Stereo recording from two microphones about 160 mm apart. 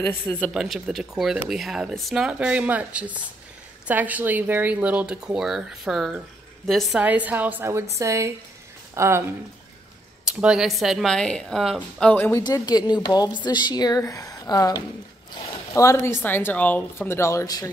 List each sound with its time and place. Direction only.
0.5 s speech: 5° right (ahead or behind)
7.0 s speech: 10° right (ahead or behind)
10.2 s speech: 5° right (ahead or behind); by 17.6 s 20° left (ahead or behind)